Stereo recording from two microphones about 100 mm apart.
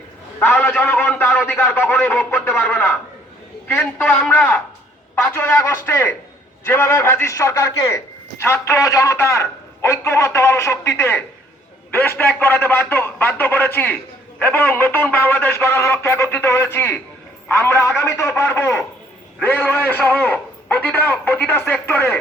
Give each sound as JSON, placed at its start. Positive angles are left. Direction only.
{"t": 0.3, "sound": "a man's voice", "side_deg": 15}
{"t": 3.7, "sound": "a man's voice", "side_deg": 20}